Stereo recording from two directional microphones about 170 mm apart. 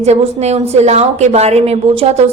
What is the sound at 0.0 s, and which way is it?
A woman's voice, 40° right (ahead or behind).